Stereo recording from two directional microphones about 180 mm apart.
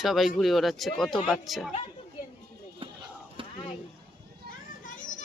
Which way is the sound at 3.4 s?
30° right (ahead or behind).